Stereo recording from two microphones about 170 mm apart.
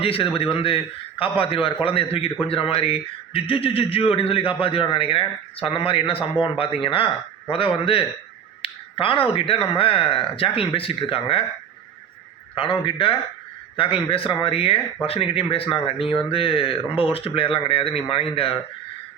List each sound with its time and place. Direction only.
0.0 s speech: 35° left (ahead or behind)
12.5 s speech: 30° left (ahead or behind)